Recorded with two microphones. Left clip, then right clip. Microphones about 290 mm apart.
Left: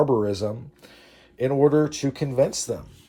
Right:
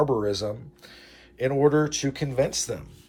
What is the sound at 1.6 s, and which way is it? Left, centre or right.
Speech, left.